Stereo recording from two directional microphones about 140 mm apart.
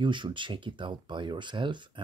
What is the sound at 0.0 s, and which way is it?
Speech, 35° right (ahead or behind).